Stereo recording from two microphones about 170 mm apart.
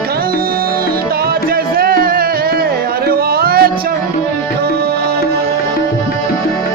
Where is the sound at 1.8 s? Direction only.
60° right (ahead or behind).